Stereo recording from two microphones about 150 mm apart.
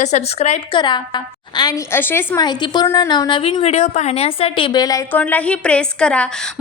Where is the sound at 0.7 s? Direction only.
30° left (ahead or behind).